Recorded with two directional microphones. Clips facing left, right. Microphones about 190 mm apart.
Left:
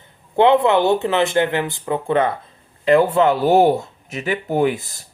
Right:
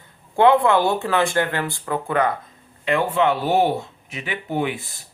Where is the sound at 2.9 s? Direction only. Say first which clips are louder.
Left 5 dB; 40° left (ahead or behind).